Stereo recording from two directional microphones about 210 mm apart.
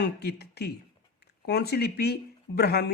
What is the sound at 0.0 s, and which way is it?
A man's voice, 50° left (ahead or behind).